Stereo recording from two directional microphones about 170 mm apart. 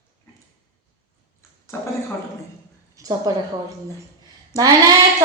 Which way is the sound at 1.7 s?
15° left (ahead or behind).